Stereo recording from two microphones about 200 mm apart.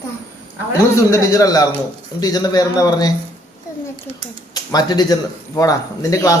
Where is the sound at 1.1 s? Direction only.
15° left (ahead or behind).